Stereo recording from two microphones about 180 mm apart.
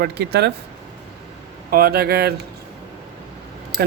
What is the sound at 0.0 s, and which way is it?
Speech, 65° right (ahead or behind).